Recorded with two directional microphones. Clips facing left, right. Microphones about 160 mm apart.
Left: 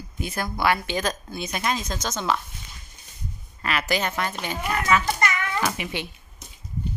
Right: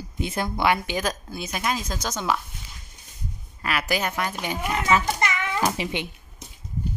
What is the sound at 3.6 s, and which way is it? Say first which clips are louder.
Speech: even; 10° right (ahead or behind).